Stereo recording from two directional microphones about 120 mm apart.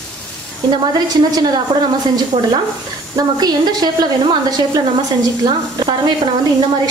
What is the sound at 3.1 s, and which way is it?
A woman's voice, 35° right (ahead or behind).